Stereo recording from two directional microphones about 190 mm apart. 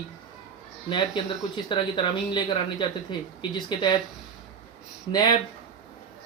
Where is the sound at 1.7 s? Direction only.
25° left (ahead or behind).